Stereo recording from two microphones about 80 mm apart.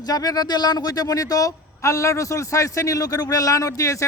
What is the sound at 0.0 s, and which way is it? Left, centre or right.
Speech, left.